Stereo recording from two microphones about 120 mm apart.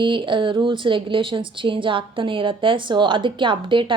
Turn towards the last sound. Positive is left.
turn(degrees=-45)  # may be behind; listen again after turning